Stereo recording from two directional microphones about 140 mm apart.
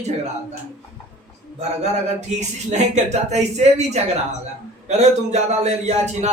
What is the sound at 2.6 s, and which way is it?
A man's voice, 55° right (ahead or behind).